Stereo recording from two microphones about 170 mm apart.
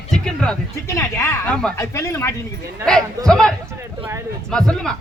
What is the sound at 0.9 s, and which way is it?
Speech, 15° left (ahead or behind).